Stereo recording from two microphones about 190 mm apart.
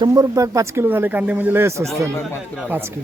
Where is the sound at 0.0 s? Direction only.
20° right (ahead or behind).